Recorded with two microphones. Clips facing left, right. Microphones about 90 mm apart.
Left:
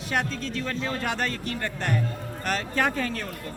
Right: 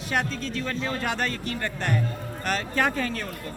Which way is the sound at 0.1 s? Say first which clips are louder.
Even; 25° right (ahead or behind).